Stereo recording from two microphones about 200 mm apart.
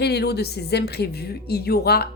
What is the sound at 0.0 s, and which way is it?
Speech, 55° left (ahead or behind).